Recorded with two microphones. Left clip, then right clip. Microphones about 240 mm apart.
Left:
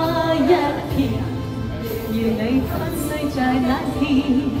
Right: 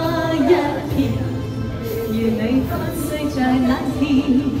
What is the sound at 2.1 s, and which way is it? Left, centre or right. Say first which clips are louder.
Music: even; left.